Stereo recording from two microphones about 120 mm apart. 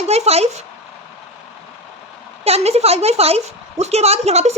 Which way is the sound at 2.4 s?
60° right (ahead or behind).